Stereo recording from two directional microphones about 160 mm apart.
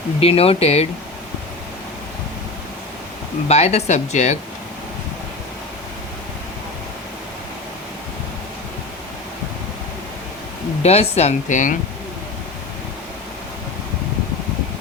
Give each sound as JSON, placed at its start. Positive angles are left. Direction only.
{"t": 0.2, "sound": "speech", "side_deg": 40}
{"t": 3.5, "sound": "speech", "side_deg": 45}
{"t": 10.8, "sound": "speech", "side_deg": 40}